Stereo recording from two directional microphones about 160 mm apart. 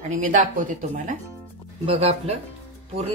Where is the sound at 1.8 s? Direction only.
40° right (ahead or behind).